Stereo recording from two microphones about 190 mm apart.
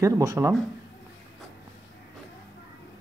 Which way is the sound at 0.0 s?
20° right (ahead or behind).